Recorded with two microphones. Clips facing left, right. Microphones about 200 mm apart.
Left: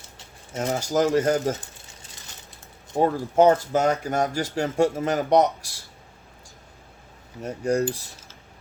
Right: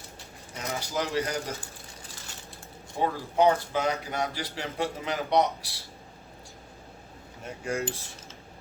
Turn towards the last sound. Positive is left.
turn(degrees=40)  # may be behind; listen again after turning